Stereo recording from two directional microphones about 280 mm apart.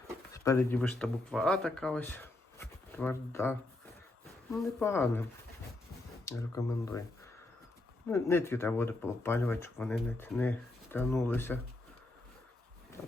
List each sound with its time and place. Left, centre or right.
0.3 s speech: centre
4.5 s speech: centre
6.2 s speech: centre
8.0 s speech: centre